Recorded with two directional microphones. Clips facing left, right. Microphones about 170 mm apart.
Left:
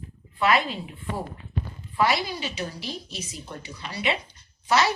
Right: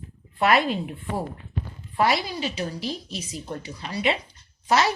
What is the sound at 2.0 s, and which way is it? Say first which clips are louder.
A woman's voice: right 1 dB; 40° right (ahead or behind).